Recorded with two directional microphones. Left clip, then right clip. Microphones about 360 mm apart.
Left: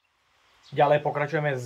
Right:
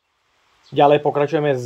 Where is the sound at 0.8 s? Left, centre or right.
Right.